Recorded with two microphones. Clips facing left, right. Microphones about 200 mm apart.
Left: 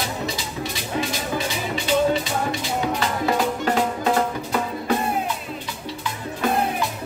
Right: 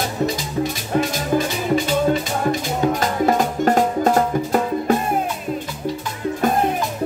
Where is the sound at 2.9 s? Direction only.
45° right (ahead or behind).